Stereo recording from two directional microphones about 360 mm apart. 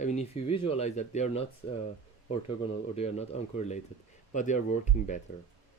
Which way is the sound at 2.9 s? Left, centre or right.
Centre.